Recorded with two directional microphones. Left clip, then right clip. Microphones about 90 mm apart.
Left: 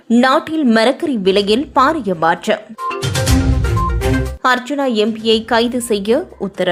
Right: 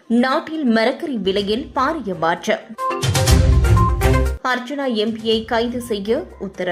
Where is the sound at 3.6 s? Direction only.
Centre (ahead or behind).